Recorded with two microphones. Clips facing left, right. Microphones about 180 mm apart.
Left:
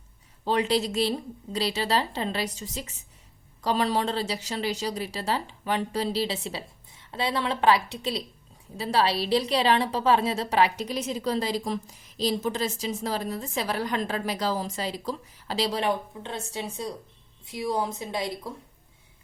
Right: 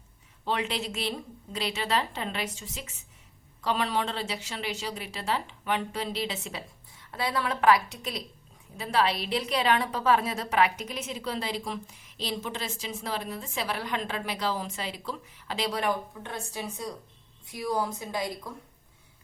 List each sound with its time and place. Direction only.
0.4 s a woman's voice: 35° left (ahead or behind)